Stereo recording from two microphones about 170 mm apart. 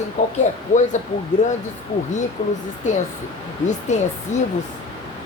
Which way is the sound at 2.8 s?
45° left (ahead or behind).